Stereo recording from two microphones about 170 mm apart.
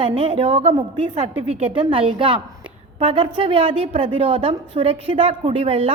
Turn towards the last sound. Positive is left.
turn(degrees=-35)  # may be behind; listen again after turning